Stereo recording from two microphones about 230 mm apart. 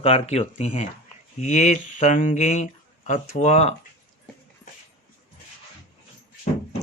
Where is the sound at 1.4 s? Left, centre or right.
Left.